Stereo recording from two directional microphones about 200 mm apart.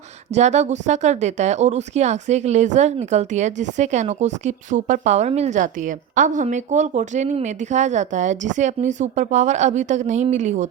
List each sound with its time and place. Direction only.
0.3 s speech: 35° right (ahead or behind)